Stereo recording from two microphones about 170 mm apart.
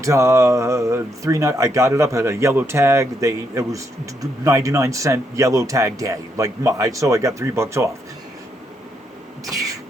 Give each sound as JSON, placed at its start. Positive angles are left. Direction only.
{"t": 0.0, "sound": "speech", "side_deg": -15}